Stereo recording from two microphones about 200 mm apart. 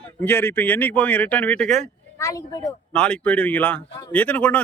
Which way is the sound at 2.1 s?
15° left (ahead or behind).